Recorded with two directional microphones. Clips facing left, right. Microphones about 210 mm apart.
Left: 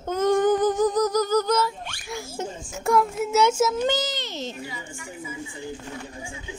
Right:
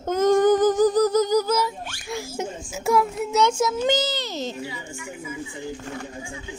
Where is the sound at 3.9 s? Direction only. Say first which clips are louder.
Right 3 dB; 30° right (ahead or behind).